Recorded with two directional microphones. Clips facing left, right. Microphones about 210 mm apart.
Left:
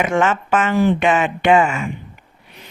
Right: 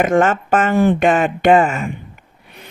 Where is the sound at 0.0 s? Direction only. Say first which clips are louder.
Right 3 dB; 50° right (ahead or behind).